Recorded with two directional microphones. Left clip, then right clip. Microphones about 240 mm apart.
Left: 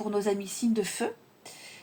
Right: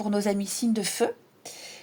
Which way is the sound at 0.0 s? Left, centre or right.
Right.